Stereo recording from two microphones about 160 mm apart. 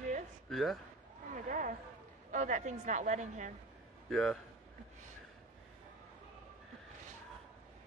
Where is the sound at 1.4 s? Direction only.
55° right (ahead or behind).